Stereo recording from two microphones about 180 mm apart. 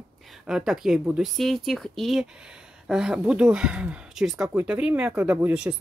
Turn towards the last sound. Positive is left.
turn(degrees=-5)  # may be behind; listen again after turning